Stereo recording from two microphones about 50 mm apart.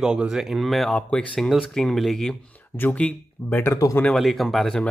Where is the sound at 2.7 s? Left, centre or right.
Left.